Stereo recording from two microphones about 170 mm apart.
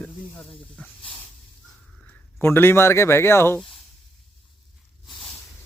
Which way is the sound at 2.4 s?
15° left (ahead or behind).